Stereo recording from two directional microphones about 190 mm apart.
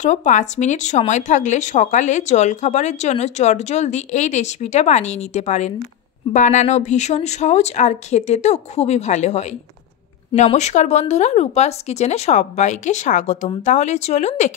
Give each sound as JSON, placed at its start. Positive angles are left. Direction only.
{"t": 0.0, "sound": "speech", "side_deg": 40}